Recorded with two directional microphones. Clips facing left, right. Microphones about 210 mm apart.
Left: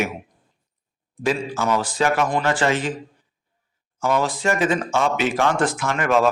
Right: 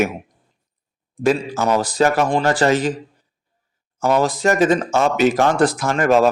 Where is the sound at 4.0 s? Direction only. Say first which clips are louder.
Right 4 dB; 40° right (ahead or behind).